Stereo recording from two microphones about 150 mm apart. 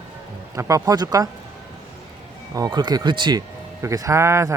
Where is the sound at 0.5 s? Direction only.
20° right (ahead or behind).